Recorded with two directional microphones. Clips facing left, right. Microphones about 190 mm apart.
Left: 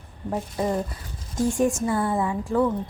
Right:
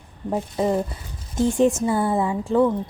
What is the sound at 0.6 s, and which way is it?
Speech, 25° right (ahead or behind).